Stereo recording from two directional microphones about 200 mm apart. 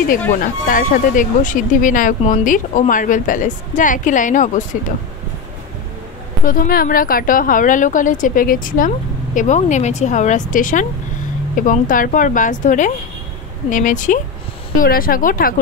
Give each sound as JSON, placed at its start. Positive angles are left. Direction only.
{"t": 0.4, "sound": "a woman's voice", "side_deg": 45}
{"t": 6.4, "sound": "a woman's voice", "side_deg": 45}